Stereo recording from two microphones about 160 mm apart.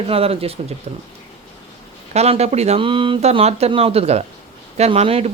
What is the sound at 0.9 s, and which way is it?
Speech, 50° right (ahead or behind).